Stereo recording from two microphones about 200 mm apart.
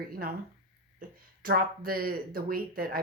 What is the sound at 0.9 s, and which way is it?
Speech, 45° right (ahead or behind).